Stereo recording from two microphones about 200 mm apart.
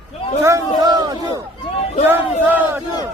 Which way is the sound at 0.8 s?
20° right (ahead or behind).